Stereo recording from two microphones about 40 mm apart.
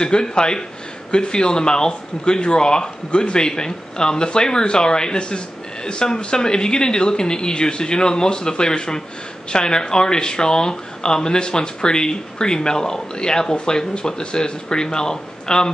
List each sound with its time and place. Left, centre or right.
0.0 s speech: centre